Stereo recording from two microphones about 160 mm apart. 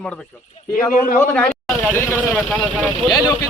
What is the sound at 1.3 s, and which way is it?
Speech, 10° left (ahead or behind).